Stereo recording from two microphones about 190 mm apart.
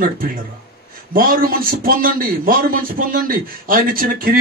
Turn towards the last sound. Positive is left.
turn(degrees=-50)  # may be behind; listen again after turning